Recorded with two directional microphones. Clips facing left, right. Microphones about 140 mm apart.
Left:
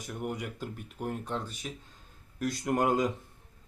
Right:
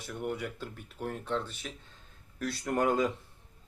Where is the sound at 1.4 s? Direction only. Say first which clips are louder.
Even; 40° left (ahead or behind).